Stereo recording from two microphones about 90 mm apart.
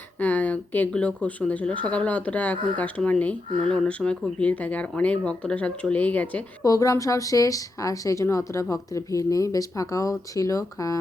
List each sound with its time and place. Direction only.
0.2 s speech: 20° left (ahead or behind)
6.6 s speech: 40° left (ahead or behind)